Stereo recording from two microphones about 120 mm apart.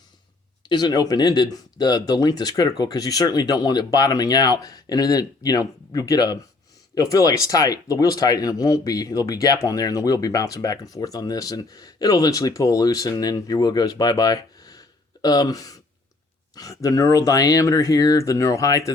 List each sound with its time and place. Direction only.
0.7 s speech: 35° left (ahead or behind)